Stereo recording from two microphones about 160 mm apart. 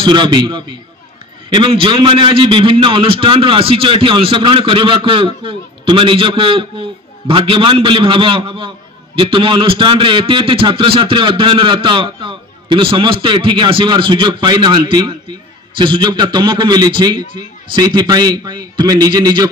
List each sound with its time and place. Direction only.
0.0 s a man's voice: 30° right (ahead or behind)